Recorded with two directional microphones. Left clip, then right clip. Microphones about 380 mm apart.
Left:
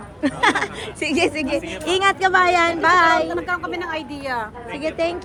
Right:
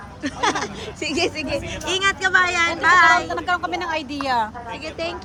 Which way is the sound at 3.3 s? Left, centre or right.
Right.